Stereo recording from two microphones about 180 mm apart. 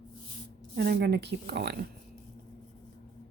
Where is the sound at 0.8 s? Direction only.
60° right (ahead or behind).